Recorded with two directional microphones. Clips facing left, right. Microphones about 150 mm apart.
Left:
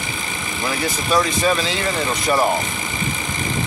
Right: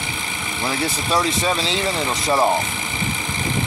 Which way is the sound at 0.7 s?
25° right (ahead or behind).